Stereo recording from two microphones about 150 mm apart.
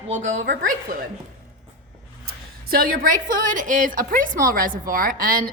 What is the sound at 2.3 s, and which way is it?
A woman's voice, 85° right.